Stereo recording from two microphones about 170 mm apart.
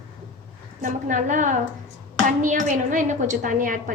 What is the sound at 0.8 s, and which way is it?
A woman's voice, 50° right (ahead or behind).